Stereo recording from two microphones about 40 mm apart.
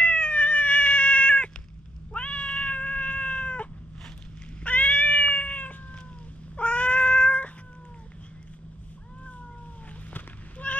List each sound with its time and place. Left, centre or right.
0.0 s cat: left
4.6 s cat: left
10.1 s a sound: left